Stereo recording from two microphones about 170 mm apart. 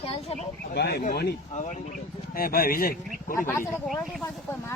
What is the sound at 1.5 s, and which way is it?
Speech, 45° left (ahead or behind).